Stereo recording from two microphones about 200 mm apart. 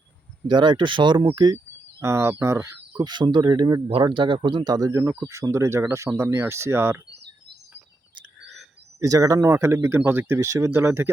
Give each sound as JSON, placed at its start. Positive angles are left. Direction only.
{"t": 0.4, "sound": "speech", "side_deg": -20}
{"t": 9.0, "sound": "speech", "side_deg": -15}